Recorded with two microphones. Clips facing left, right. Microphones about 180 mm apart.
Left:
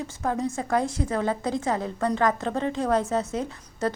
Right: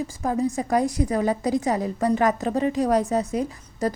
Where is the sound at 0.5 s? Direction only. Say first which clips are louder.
Right 3 dB; 15° right (ahead or behind).